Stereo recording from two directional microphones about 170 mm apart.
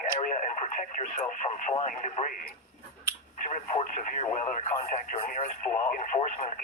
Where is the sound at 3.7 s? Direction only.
45° left (ahead or behind).